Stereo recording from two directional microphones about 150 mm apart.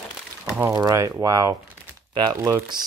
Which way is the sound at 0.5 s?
20° right (ahead or behind).